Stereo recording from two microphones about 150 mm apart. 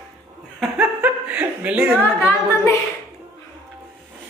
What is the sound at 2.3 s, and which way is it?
Music, 15° left (ahead or behind).